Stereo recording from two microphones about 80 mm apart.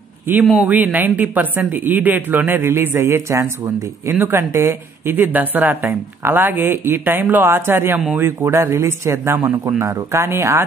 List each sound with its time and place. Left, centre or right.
0.6 s a man's voice: right
9.8 s speech: right
10.2 s speech: right